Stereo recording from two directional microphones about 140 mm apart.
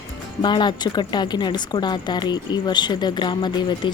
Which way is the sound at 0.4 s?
30° left (ahead or behind).